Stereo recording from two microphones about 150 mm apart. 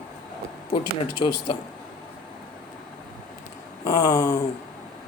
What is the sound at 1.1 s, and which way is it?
Speech, 35° left (ahead or behind).